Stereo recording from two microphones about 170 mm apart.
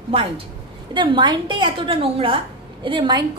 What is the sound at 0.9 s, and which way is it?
A woman's voice, 30° right (ahead or behind).